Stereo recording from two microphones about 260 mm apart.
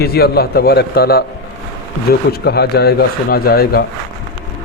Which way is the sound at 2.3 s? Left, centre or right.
Left.